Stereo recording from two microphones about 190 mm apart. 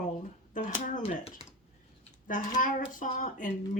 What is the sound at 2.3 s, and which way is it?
Speech, 45° left (ahead or behind).